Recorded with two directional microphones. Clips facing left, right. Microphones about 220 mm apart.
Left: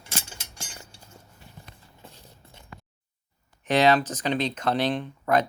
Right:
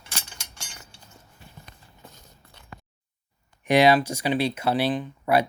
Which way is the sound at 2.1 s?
30° left (ahead or behind).